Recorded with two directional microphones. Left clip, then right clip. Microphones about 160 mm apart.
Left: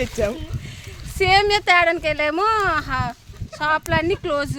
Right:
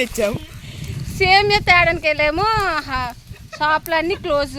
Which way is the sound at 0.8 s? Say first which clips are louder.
Right 3 dB; centre (ahead or behind).